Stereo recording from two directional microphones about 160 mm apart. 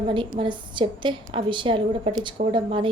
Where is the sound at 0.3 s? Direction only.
30° right (ahead or behind).